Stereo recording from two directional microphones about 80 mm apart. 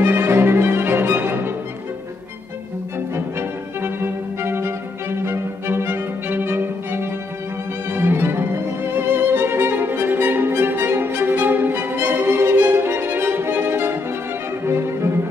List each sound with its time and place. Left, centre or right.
0.0 s music: right
3.3 s music: right
7.9 s violin: right
14.7 s music: right